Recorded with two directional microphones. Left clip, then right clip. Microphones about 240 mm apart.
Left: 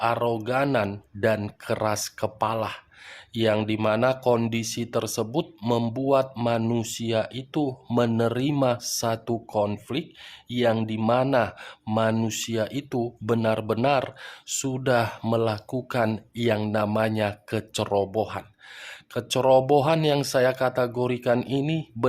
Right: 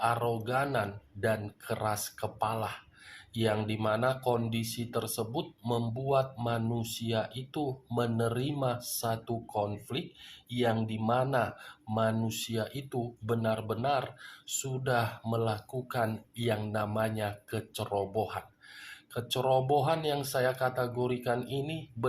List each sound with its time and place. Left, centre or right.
0.0 s speech: left